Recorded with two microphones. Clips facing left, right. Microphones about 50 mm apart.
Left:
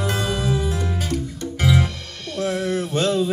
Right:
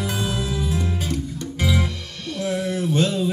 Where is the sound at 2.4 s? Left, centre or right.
Left.